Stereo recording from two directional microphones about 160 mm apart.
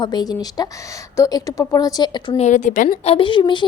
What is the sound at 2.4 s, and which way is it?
Speech, 50° left (ahead or behind).